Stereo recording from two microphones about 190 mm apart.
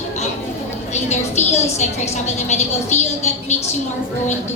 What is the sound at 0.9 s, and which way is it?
A woman's voice, 35° left (ahead or behind).